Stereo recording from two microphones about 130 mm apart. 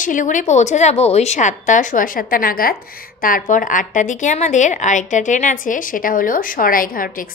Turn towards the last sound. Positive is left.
turn(degrees=90)